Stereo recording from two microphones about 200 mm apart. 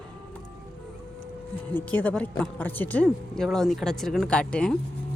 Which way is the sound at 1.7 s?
10° left (ahead or behind).